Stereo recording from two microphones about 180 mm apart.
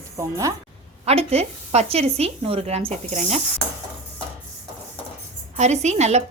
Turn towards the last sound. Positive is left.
turn(degrees=-40)  # may be behind; listen again after turning